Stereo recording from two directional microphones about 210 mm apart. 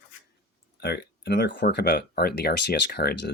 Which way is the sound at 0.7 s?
55° left (ahead or behind).